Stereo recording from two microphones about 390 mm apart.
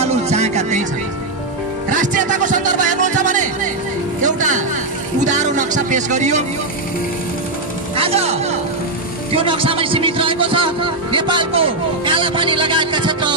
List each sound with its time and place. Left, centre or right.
0.0 s music: centre
1.9 s music: centre
7.9 s music: centre
9.3 s speech: centre